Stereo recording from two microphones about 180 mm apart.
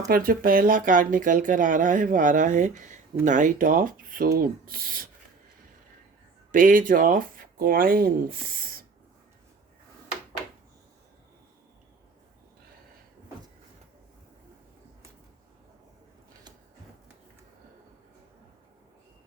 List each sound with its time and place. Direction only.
0.1 s speech: 50° right (ahead or behind)
6.5 s speech: 45° right (ahead or behind)